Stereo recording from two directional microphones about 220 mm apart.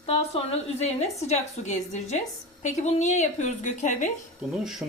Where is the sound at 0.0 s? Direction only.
30° left (ahead or behind).